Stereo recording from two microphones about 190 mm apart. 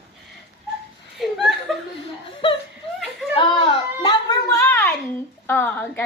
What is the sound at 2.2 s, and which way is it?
Chuckle, 25° left (ahead or behind).